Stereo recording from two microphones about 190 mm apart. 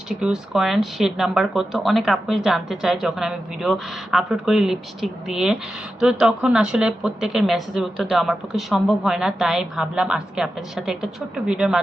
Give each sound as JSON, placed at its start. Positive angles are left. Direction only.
{"t": 0.2, "sound": "a woman's voice", "side_deg": 0}